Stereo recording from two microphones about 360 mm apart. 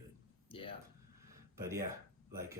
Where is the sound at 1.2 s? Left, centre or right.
Centre.